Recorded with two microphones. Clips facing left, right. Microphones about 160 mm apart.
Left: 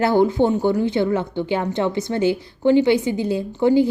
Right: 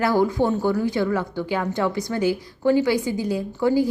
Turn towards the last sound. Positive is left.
turn(degrees=25)  # may be behind; listen again after turning